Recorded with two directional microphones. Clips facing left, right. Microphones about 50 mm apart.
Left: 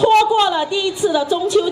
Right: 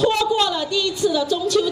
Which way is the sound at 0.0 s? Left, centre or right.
Left.